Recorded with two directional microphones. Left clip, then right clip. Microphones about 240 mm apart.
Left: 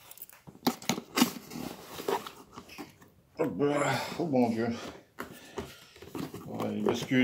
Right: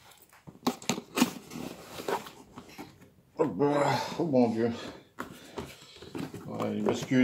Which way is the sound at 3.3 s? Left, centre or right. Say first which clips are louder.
Right 2 dB; centre.